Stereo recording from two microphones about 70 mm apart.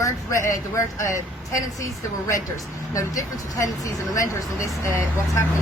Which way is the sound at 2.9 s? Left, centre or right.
Left.